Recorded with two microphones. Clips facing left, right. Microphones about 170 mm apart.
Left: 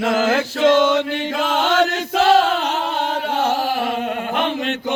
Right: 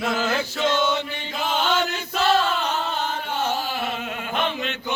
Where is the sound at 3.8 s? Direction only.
40° left (ahead or behind).